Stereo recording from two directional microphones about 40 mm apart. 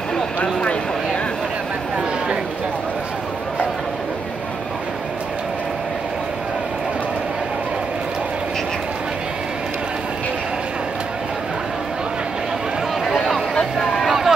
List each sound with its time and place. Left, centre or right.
0.4 s vehicle: left
13.0 s a sound: centre
13.7 s vehicle: centre